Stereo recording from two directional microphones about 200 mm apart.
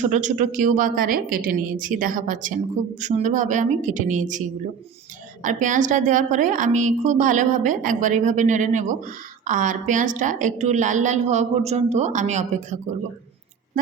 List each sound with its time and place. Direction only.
0.0 s a woman's voice: 40° right (ahead or behind)